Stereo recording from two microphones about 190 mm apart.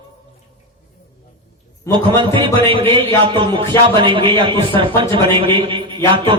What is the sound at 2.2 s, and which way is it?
A man's voice, 25° right (ahead or behind).